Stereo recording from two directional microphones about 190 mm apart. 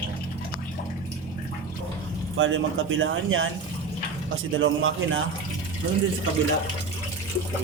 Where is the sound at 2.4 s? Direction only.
90° right.